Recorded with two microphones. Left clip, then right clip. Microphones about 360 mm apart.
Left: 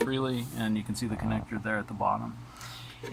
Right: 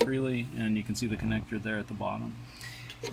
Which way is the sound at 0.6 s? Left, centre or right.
Left.